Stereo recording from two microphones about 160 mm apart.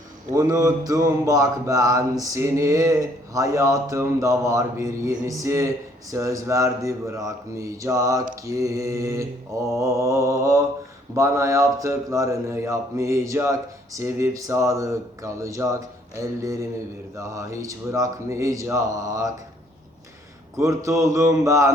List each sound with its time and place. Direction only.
0.3 s mantra: 20° right (ahead or behind)
20.6 s mantra: 20° right (ahead or behind)